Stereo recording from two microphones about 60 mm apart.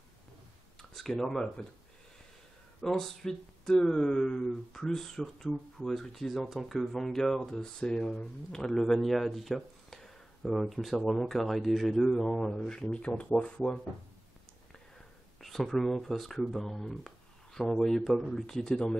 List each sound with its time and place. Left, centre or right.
0.8 s a sound: centre
1.2 s speech: centre
2.8 s speech: centre
12.8 s speech: left
15.4 s speech: centre